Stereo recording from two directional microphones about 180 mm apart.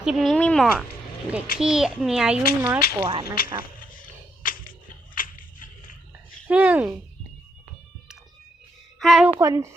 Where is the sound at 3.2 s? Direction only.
55° left (ahead or behind).